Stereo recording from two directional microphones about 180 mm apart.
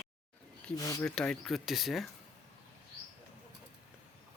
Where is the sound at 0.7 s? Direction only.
20° left (ahead or behind).